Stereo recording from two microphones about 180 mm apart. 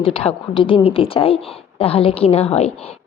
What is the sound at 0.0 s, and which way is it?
A woman's voice, 30° left (ahead or behind).